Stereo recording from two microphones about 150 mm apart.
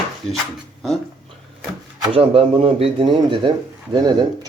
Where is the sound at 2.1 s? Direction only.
40° right (ahead or behind).